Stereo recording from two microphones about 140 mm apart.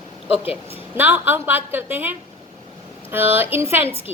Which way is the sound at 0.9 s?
15° right (ahead or behind).